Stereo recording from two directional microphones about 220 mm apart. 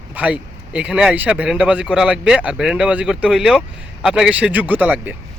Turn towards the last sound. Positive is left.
turn(degrees=-5)  # may be behind; listen again after turning